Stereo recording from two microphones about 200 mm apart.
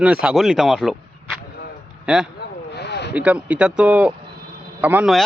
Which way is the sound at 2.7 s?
60° left (ahead or behind).